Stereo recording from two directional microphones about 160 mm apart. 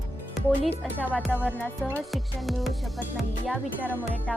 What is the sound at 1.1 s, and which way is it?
Music, 10° left (ahead or behind).